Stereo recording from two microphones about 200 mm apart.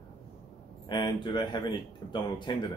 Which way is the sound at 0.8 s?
25° left (ahead or behind).